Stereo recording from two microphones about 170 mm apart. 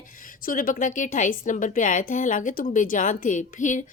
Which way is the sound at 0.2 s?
55° left (ahead or behind).